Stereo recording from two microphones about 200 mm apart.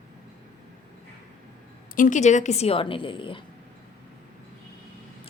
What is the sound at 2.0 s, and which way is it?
A woman's voice, 40° left (ahead or behind).